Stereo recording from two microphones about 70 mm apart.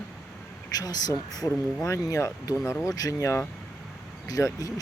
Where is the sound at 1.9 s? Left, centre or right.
Left.